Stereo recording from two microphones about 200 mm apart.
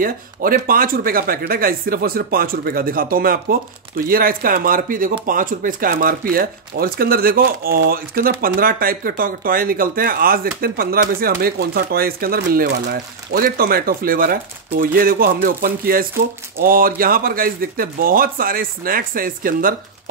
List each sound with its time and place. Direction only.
0.0 s speech: 45° right (ahead or behind)